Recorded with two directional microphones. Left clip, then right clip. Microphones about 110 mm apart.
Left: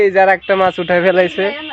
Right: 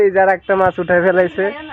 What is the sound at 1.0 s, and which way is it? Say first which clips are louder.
Speech: left 1 dB; centre (ahead or behind).